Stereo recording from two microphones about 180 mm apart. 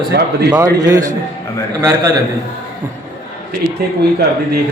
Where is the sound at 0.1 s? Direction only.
60° right (ahead or behind).